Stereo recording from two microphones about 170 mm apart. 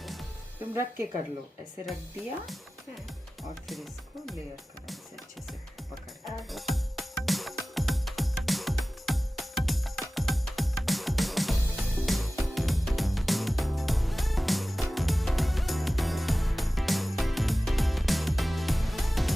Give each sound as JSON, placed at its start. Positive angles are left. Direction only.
{"t": 0.0, "sound": "music", "side_deg": 0}
{"t": 0.7, "sound": "speech", "side_deg": -15}
{"t": 6.2, "sound": "music", "side_deg": 0}